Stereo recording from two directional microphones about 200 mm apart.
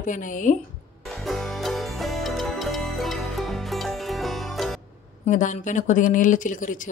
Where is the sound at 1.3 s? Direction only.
Centre (ahead or behind).